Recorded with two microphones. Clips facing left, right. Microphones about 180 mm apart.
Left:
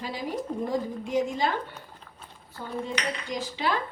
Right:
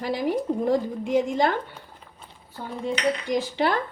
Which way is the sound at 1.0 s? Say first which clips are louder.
Right 5 dB; 60° right (ahead or behind).